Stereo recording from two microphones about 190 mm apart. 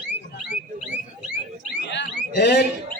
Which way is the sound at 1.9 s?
65° left (ahead or behind).